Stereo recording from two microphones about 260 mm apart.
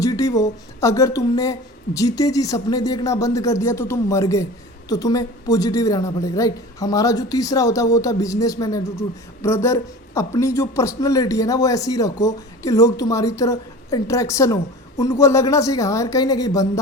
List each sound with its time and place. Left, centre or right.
0.0 s a woman's voice: centre